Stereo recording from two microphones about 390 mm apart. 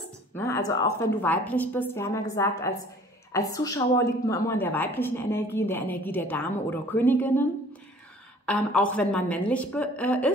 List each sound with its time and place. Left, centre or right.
0.3 s a woman's voice: centre
8.5 s a woman's voice: centre